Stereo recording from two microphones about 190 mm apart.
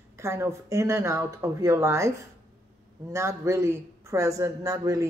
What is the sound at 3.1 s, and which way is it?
Speech, 15° right (ahead or behind).